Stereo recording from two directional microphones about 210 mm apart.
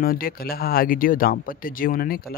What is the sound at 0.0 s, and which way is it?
A man's voice, 45° left (ahead or behind).